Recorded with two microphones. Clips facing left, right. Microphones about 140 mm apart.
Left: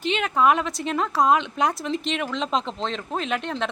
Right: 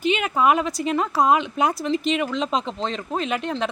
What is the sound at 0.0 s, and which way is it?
Speech, 5° right (ahead or behind).